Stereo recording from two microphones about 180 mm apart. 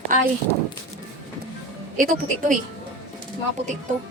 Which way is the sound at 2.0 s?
50° right (ahead or behind).